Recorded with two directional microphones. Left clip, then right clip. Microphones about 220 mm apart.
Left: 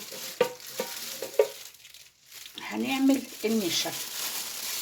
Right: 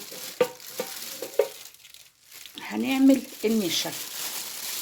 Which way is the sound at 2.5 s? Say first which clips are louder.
Right 3 dB; 50° right (ahead or behind).